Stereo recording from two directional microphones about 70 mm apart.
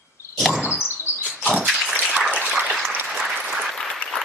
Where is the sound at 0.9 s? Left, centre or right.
Right.